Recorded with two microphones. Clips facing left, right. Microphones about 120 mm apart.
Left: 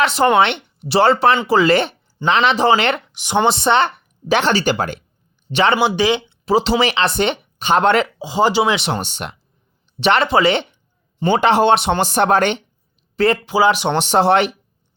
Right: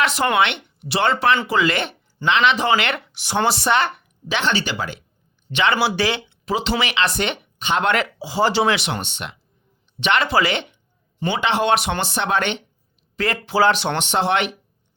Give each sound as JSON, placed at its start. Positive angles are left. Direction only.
{"t": 0.0, "sound": "speech", "side_deg": 30}
{"t": 3.1, "sound": "speech", "side_deg": 15}
{"t": 4.3, "sound": "speech", "side_deg": 45}
{"t": 5.5, "sound": "speech", "side_deg": 35}
{"t": 5.7, "sound": "speech", "side_deg": 20}
{"t": 6.4, "sound": "speech", "side_deg": 35}
{"t": 8.2, "sound": "speech", "side_deg": 20}
{"t": 8.8, "sound": "speech", "side_deg": 35}
{"t": 11.2, "sound": "speech", "side_deg": 45}
{"t": 11.7, "sound": "speech", "side_deg": 30}
{"t": 11.9, "sound": "speech", "side_deg": 45}
{"t": 13.1, "sound": "speech", "side_deg": 30}
{"t": 13.5, "sound": "speech", "side_deg": 15}
{"t": 13.9, "sound": "speech", "side_deg": 40}